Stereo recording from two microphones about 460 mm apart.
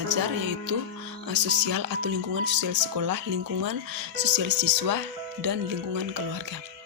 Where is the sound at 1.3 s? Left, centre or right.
Right.